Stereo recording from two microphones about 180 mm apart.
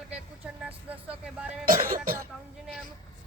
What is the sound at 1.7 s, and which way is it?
Speech, 50° right (ahead or behind).